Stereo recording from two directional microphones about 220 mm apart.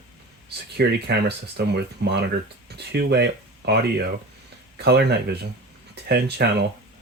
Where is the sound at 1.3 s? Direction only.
50° right (ahead or behind).